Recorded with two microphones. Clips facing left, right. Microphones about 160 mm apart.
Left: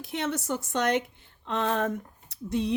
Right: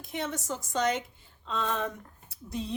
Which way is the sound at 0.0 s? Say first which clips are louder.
Left 4 dB; 75° left (ahead or behind).